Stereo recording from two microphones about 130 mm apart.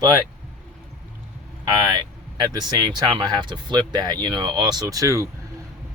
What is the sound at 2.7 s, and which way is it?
Speech, 35° right (ahead or behind).